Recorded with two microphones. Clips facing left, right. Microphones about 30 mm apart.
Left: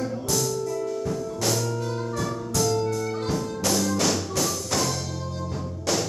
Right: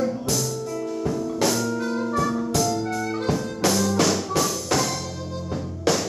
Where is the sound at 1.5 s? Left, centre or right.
Centre.